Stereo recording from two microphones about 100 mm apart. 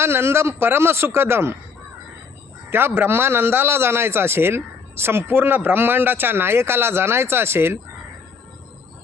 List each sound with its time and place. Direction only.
0.0 s a man's voice: 25° right (ahead or behind)
2.6 s a man's voice: 25° right (ahead or behind)